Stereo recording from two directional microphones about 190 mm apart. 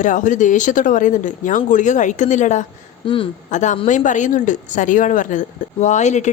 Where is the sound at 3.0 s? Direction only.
25° left (ahead or behind).